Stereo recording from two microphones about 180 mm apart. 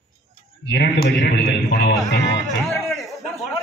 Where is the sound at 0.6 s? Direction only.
70° left (ahead or behind).